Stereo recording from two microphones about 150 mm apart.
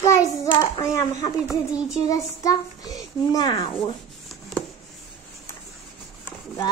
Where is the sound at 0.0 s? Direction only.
20° left (ahead or behind).